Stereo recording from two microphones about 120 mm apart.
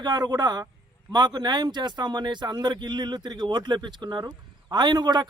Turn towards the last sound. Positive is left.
turn(degrees=-35)  # may be behind; listen again after turning